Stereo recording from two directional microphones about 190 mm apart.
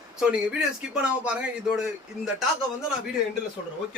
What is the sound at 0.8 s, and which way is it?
Speech, 5° right (ahead or behind).